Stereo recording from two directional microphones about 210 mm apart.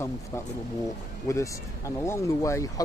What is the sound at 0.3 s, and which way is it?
Speech, 15° left (ahead or behind).